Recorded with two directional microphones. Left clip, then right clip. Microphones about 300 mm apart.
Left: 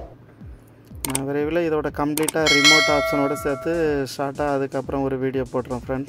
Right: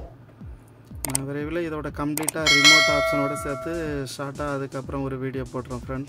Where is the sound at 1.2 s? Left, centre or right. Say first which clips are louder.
Left 8 dB; centre.